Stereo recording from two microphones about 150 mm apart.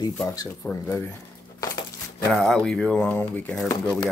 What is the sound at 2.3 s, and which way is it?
Speech, centre (ahead or behind).